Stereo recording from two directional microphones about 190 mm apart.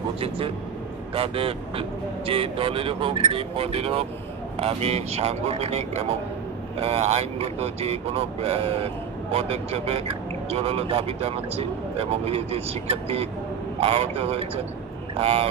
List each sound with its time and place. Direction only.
1.1 s speech: 30° right (ahead or behind)